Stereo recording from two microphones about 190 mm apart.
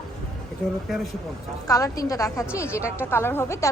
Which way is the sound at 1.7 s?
20° left (ahead or behind).